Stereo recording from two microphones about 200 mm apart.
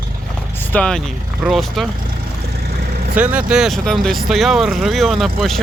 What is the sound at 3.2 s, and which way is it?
Speech, 5° right (ahead or behind).